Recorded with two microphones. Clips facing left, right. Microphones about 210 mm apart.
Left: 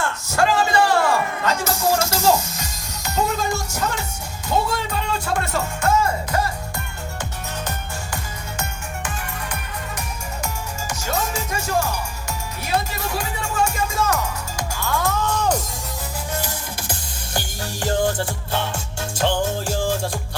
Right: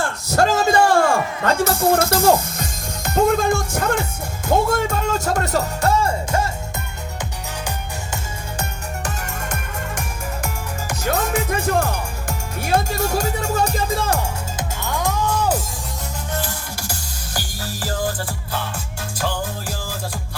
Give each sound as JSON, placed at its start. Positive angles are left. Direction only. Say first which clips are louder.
{"t": 0.0, "sound": "a sound", "louder": "right 2 dB", "side_deg": -40}
{"t": 4.4, "sound": "speech", "louder": "right 4 dB", "side_deg": -50}
{"t": 9.0, "sound": "music", "louder": "right 2 dB", "side_deg": -45}
{"t": 10.4, "sound": "music", "louder": "right 2 dB", "side_deg": -55}
{"t": 16.4, "sound": "music", "louder": "right 1 dB", "side_deg": 20}